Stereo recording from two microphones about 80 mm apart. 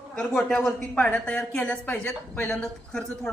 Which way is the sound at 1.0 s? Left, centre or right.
Centre.